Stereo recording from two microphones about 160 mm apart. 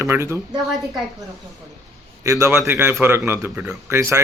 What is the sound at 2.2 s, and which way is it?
A man's voice, 20° right (ahead or behind).